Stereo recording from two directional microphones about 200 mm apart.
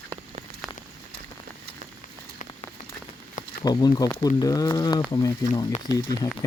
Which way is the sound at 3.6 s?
20° left (ahead or behind).